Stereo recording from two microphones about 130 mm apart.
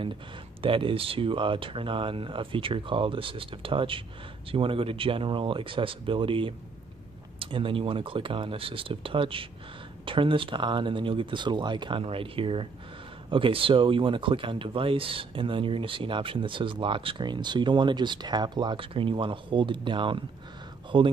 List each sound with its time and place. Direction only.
0.6 s speech: 40° right (ahead or behind)